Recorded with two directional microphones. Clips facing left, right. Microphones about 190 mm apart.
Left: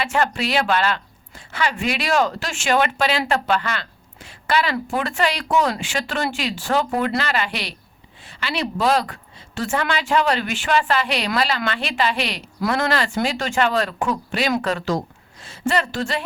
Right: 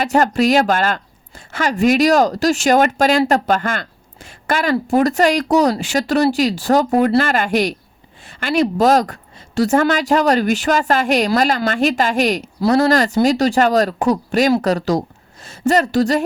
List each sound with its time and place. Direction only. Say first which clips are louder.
0.0 s a woman's voice: right 7 dB; 45° right (ahead or behind)